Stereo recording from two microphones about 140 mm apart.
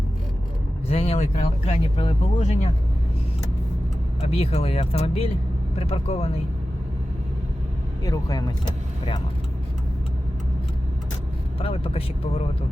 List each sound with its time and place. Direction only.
0.9 s speech: 45° left (ahead or behind)
2.4 s speech: 55° left (ahead or behind)
4.2 s speech: 45° left (ahead or behind)
8.0 s speech: 25° left (ahead or behind)
11.6 s speech: 45° left (ahead or behind)